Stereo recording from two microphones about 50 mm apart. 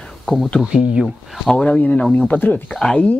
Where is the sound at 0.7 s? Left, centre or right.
Centre.